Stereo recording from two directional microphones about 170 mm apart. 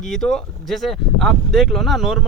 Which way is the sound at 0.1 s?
Centre (ahead or behind).